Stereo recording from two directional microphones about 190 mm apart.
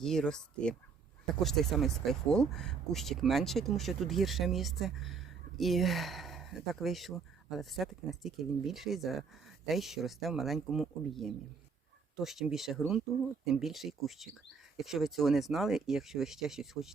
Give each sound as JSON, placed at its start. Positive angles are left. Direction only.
{"t": 0.0, "sound": "speech", "side_deg": 5}